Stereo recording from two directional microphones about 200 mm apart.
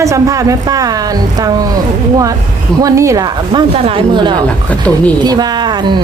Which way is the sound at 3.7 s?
30° right (ahead or behind).